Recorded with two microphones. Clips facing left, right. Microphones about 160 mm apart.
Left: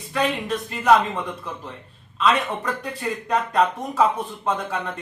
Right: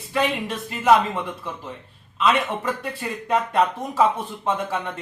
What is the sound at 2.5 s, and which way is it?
Speech, 5° right (ahead or behind).